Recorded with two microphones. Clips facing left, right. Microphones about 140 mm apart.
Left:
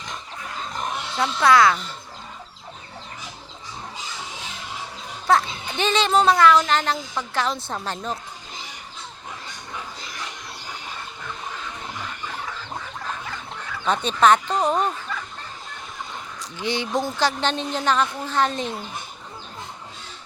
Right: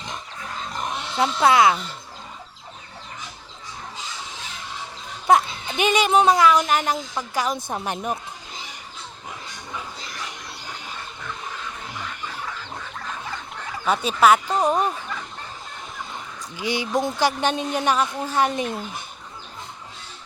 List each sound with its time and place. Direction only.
1.1 s speech: 25° right (ahead or behind)
5.3 s speech: 15° right (ahead or behind)
13.8 s speech: 5° right (ahead or behind)
16.6 s speech: 10° right (ahead or behind)